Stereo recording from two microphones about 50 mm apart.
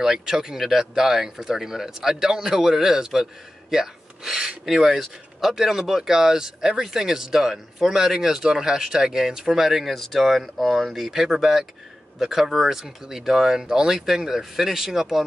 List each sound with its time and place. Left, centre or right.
0.0 s speech: centre